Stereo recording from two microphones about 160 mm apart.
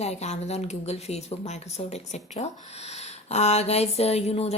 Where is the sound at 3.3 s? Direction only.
45° left (ahead or behind).